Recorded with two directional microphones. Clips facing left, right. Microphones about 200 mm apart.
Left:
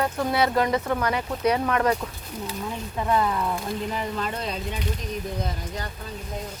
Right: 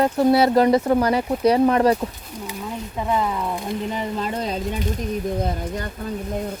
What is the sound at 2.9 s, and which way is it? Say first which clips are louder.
Speech: right 1 dB; 10° right (ahead or behind).